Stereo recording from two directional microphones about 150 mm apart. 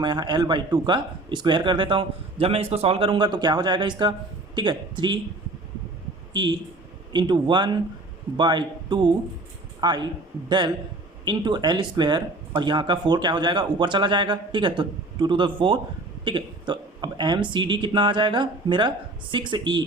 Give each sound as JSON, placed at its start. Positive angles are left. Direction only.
{"t": 0.0, "sound": "speech", "side_deg": -30}
{"t": 6.3, "sound": "speech", "side_deg": -30}
{"t": 11.3, "sound": "speech", "side_deg": -30}